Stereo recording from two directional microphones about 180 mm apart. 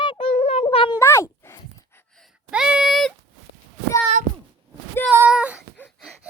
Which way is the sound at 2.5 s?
5° right (ahead or behind).